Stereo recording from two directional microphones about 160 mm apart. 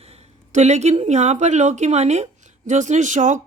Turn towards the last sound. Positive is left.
turn(degrees=-50)  # may be behind; listen again after turning